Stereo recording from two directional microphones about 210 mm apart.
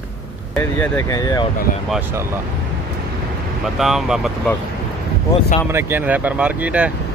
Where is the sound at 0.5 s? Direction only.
10° left (ahead or behind).